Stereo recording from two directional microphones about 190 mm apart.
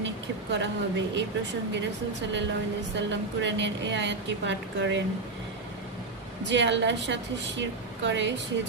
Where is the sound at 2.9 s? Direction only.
70° right (ahead or behind).